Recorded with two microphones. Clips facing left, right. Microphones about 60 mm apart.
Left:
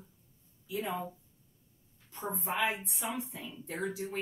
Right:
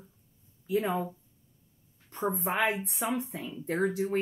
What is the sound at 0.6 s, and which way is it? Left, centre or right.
Speech, right.